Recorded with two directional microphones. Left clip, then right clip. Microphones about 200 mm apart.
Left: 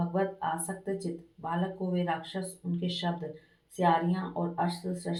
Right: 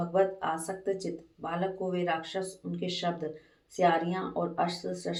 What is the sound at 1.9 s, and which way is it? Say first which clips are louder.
Speech: right 2 dB; 15° right (ahead or behind).